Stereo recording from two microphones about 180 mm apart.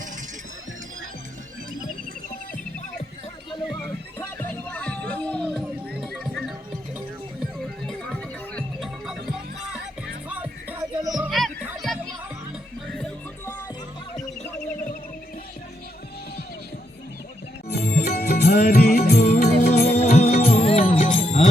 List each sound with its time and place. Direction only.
3.8 s music: 10° left (ahead or behind)
7.9 s music: centre (ahead or behind)
11.0 s music: 20° right (ahead or behind)
11.3 s music: centre (ahead or behind)
17.7 s music: 60° left (ahead or behind)
20.0 s music: 35° left (ahead or behind)